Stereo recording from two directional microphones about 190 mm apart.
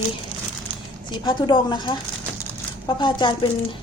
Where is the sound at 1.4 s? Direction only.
25° left (ahead or behind).